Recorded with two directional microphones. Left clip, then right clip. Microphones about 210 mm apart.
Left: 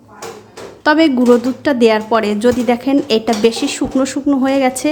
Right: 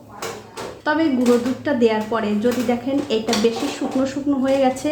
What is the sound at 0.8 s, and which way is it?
A woman's voice, 45° left (ahead or behind).